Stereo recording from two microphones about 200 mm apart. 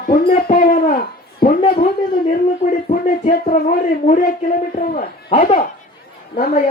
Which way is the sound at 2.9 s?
45° left (ahead or behind).